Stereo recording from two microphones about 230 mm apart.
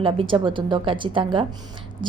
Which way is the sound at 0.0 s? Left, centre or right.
Right.